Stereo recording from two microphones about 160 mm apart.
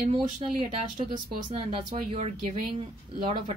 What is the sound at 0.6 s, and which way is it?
Speech, 35° right (ahead or behind).